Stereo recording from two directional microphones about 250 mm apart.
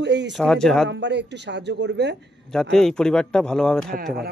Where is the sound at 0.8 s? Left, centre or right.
Right.